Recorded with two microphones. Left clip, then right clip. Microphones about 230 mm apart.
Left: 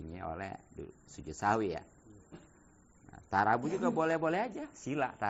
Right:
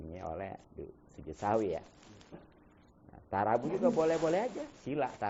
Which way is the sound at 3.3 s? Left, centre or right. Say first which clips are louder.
Left 1 dB; left.